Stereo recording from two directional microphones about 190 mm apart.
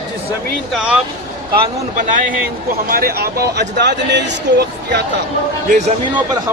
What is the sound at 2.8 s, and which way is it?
Speech, 50° right (ahead or behind).